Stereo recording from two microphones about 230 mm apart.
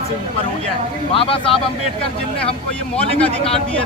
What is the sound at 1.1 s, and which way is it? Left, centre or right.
Speech, left.